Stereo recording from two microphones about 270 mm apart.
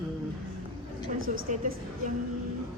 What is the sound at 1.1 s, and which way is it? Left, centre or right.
Speech, right.